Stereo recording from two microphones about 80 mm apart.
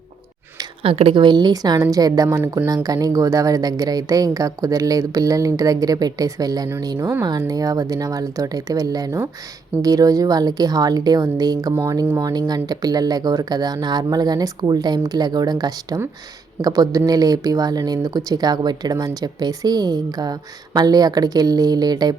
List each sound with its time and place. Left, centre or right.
1.1 s a woman's voice: right